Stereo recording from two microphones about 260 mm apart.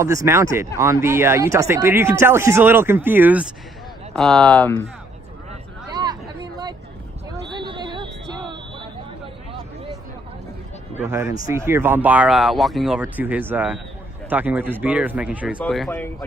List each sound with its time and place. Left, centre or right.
0.2 s speech: centre
5.9 s hubbub: centre
7.5 s a sound: centre
11.0 s speech: centre